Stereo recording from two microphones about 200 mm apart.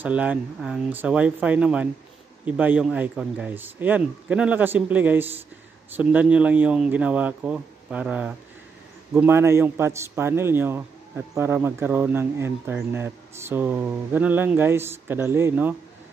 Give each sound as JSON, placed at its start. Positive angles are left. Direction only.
{"t": 0.0, "sound": "a man's voice", "side_deg": -5}